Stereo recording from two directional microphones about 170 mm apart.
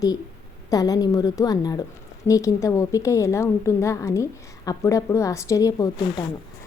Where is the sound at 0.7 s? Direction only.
20° left (ahead or behind).